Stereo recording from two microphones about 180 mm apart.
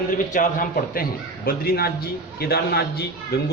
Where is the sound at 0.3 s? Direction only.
45° left (ahead or behind).